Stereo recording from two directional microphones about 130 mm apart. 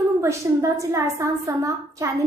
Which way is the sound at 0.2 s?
25° right (ahead or behind).